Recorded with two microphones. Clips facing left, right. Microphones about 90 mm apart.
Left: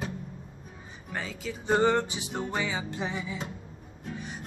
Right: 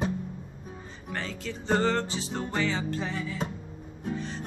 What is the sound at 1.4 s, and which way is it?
Music, 10° left (ahead or behind).